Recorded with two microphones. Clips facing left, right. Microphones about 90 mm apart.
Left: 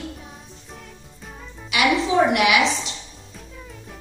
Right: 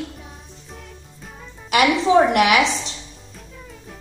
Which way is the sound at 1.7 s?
45° right (ahead or behind).